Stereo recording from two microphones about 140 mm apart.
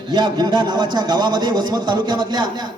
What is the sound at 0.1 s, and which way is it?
A man's voice, 30° right (ahead or behind).